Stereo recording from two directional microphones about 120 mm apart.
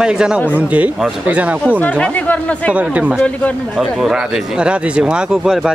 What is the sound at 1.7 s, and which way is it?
Speech, 10° left (ahead or behind).